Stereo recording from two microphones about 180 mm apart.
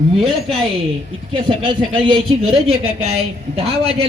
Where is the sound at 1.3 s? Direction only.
30° right (ahead or behind).